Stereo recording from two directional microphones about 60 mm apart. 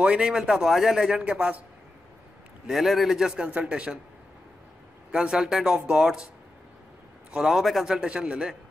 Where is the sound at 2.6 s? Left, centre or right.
Centre.